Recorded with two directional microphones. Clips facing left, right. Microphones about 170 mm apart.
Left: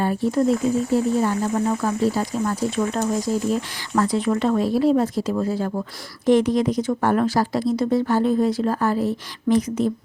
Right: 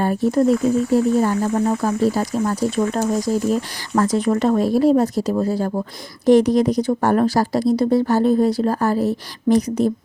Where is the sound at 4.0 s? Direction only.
45° right (ahead or behind).